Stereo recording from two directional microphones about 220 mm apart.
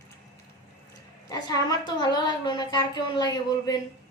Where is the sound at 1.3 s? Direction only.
15° left (ahead or behind).